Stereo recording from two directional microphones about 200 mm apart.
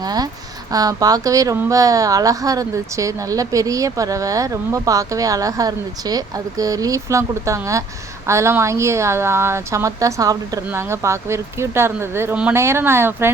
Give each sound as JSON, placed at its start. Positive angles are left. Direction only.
{"t": 0.0, "sound": "speech", "side_deg": -20}